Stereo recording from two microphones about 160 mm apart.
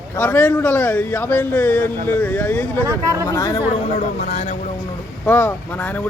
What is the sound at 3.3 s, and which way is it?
Speech, 25° left (ahead or behind).